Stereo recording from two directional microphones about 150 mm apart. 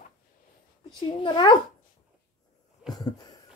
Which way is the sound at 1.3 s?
30° left (ahead or behind).